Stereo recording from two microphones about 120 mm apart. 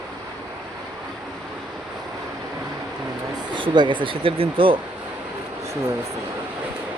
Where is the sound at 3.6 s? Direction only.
40° right (ahead or behind).